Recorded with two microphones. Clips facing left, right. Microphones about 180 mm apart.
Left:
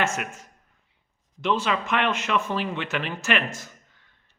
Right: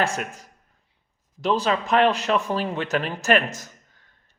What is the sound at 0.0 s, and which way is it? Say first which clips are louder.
Speech: right 2 dB; 35° right (ahead or behind).